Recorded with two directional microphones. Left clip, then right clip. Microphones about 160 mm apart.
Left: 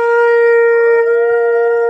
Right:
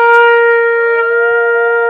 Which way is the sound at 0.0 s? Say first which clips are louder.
Right 3 dB; 60° left (ahead or behind).